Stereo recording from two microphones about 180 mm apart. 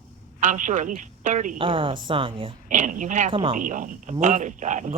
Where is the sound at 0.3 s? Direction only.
45° right (ahead or behind).